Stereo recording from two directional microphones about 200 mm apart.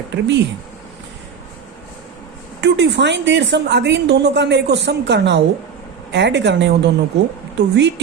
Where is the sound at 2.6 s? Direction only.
60° right (ahead or behind).